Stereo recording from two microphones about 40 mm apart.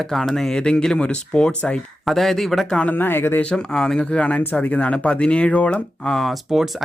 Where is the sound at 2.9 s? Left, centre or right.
Left.